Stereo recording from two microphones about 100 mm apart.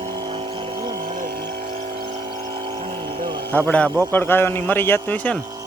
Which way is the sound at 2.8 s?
60° right (ahead or behind).